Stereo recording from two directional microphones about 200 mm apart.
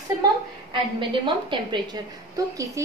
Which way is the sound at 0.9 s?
25° right (ahead or behind).